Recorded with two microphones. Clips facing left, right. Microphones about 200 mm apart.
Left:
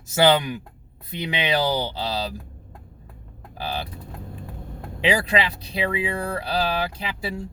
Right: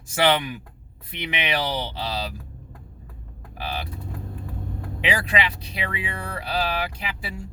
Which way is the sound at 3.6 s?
30° left (ahead or behind).